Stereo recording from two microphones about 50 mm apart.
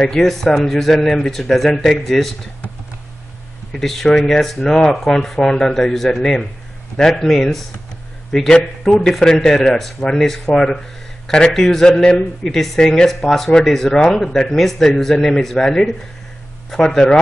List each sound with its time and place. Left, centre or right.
0.0 s speech: centre
1.7 s speech: centre
3.7 s a man's voice: centre